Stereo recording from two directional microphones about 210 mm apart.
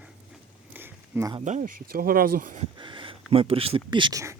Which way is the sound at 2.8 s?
25° right (ahead or behind).